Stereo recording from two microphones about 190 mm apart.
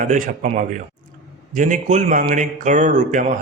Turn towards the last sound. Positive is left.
turn(degrees=-40)  # may be behind; listen again after turning